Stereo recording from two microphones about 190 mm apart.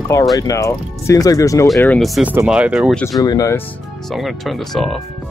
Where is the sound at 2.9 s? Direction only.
5° left (ahead or behind).